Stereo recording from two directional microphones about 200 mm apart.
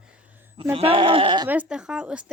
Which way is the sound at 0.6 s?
25° right (ahead or behind).